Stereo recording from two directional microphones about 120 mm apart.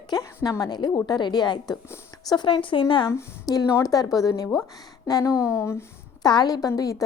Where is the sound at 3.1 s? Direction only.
30° left (ahead or behind).